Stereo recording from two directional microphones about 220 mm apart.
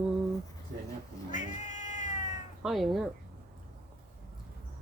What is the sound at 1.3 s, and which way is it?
Cat, 35° left (ahead or behind).